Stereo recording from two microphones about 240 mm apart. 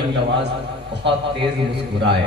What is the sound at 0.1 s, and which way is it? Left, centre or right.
Speech, right.